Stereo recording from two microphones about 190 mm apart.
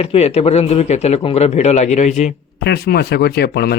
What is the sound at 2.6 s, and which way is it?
Speech, 55° left (ahead or behind).